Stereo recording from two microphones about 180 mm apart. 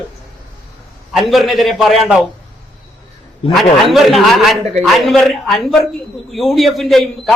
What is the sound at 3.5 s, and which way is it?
A man's voice, centre (ahead or behind).